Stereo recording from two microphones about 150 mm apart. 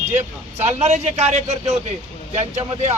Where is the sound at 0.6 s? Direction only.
50° right (ahead or behind).